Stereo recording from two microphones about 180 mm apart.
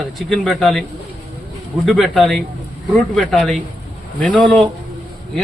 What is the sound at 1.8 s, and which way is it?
Speech, centre (ahead or behind).